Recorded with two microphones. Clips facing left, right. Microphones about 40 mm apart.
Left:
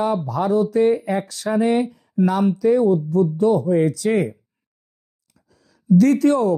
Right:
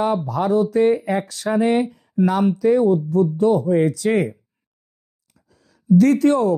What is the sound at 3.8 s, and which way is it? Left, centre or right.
Speech, right.